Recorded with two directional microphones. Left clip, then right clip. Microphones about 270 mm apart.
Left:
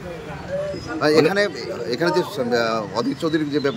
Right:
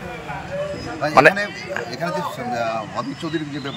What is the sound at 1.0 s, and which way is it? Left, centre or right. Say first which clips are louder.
A man's voice: right 3 dB; centre.